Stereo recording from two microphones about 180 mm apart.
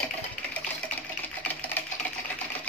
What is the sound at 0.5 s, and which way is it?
Sewing machine, 10° left (ahead or behind).